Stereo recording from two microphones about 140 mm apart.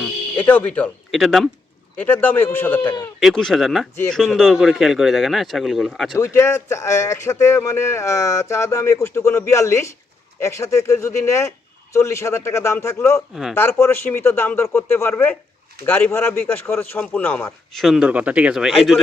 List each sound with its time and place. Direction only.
0.3 s a man's voice: 10° left (ahead or behind)
1.1 s speech: centre (ahead or behind)
2.0 s a man's voice: 15° left (ahead or behind)
3.2 s speech: centre (ahead or behind)
6.1 s speech: 20° left (ahead or behind)
13.3 s speech: 5° right (ahead or behind)
13.6 s a man's voice: 20° left (ahead or behind)
17.7 s speech: centre (ahead or behind)